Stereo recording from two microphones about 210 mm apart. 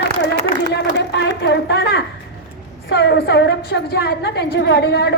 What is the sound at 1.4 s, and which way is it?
A woman's voice, 55° left (ahead or behind).